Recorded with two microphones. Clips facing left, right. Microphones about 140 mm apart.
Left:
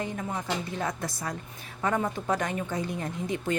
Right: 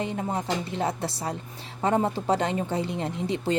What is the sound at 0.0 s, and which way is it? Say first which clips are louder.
A woman's voice: right 4 dB; 25° right (ahead or behind).